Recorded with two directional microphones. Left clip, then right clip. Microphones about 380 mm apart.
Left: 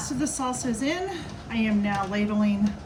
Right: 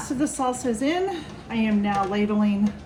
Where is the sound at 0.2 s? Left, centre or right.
Centre.